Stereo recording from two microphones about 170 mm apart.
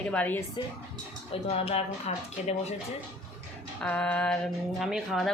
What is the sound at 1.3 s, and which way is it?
Speech, 35° left (ahead or behind).